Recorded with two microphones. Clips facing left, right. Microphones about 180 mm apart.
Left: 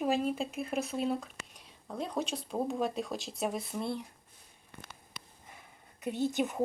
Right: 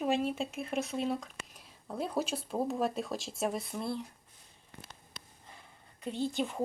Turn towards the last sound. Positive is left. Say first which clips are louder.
# left 2 dB
turn(degrees=20)  # may be behind; listen again after turning